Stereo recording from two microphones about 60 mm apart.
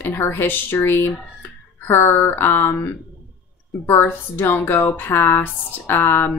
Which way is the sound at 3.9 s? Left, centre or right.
Left.